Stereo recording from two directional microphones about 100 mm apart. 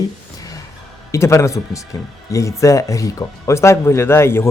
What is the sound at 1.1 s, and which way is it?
Speech, 30° left (ahead or behind).